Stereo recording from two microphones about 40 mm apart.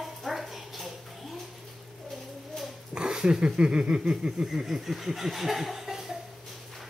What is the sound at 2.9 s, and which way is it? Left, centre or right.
Dog, right.